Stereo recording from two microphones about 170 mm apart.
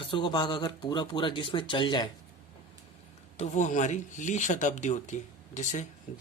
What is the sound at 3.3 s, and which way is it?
Speech, 40° left (ahead or behind).